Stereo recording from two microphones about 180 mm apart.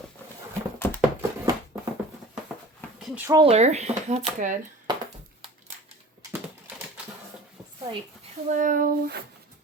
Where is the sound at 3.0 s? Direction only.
Centre (ahead or behind).